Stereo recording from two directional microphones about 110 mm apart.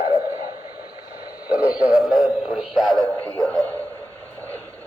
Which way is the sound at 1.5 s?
10° right (ahead or behind).